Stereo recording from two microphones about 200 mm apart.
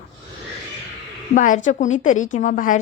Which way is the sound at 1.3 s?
40° left (ahead or behind).